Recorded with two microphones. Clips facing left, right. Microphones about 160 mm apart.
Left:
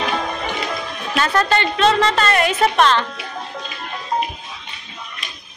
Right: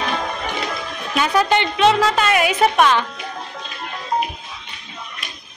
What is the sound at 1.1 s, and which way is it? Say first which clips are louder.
A woman's voice: right 1 dB; 10° right (ahead or behind).